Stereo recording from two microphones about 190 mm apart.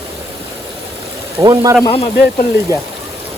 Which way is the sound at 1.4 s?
20° right (ahead or behind).